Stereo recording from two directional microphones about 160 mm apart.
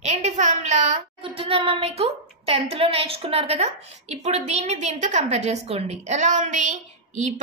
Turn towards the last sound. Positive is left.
turn(degrees=-50)  # may be behind; listen again after turning